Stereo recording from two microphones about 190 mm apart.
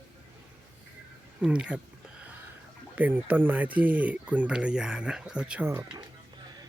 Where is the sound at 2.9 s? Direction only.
10° right (ahead or behind).